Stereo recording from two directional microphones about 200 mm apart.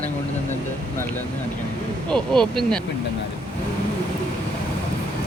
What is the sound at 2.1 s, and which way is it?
Speech, centre (ahead or behind).